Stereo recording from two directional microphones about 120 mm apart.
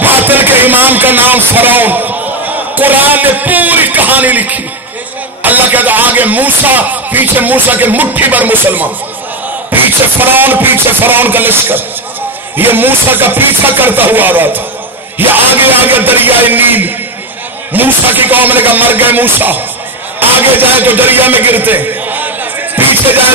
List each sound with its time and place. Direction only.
0.0 s music: 15° right (ahead or behind)
5.4 s a man's voice: 15° right (ahead or behind)
22.8 s music: 15° right (ahead or behind)